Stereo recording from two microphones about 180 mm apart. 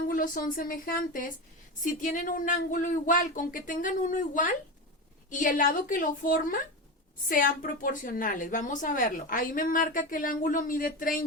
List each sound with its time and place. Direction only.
0.1 s a woman's voice: 50° left (ahead or behind)